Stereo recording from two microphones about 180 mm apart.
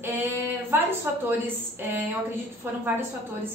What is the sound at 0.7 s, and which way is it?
Speech, 15° right (ahead or behind).